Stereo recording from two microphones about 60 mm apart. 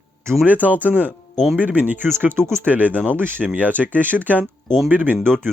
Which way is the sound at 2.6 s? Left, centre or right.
Right.